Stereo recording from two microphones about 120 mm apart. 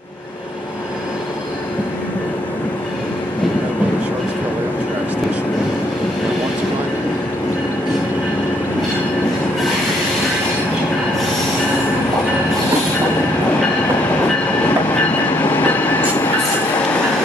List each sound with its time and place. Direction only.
15.4 s train: 15° left (ahead or behind)